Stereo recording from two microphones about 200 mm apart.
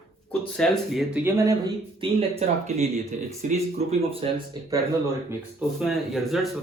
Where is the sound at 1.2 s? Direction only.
15° right (ahead or behind).